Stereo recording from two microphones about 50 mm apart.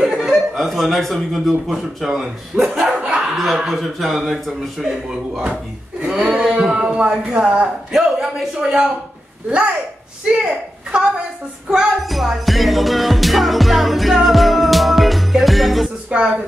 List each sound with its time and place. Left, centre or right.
0.1 s chuckle: centre
0.6 s a man's voice: centre
2.5 s speech: right
2.9 s speech: centre
3.2 s dog: centre
3.5 s a man's voice: centre
5.4 s a sound: right
7.9 s a man's voice: centre
12.0 s music: centre
16.1 s speech: right